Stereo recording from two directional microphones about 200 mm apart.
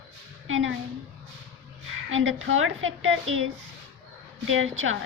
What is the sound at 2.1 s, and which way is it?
A woman's voice, 75° right (ahead or behind).